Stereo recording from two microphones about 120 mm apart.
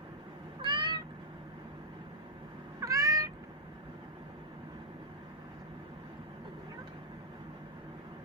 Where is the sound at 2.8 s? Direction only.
30° right (ahead or behind).